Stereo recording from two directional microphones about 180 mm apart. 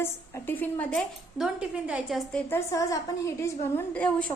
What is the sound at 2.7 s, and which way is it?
A woman's voice, 20° left (ahead or behind).